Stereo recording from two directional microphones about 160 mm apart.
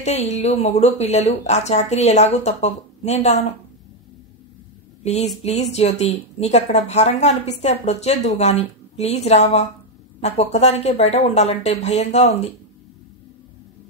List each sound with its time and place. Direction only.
0.0 s speech: 45° left (ahead or behind)
5.0 s speech: 45° left (ahead or behind)